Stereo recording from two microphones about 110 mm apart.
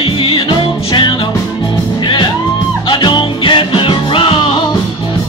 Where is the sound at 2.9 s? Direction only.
45° left (ahead or behind).